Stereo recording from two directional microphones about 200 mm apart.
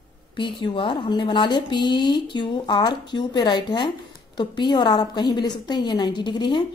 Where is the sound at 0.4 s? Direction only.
25° left (ahead or behind).